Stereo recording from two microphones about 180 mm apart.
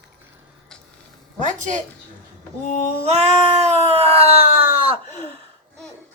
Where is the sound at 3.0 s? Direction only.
35° right (ahead or behind).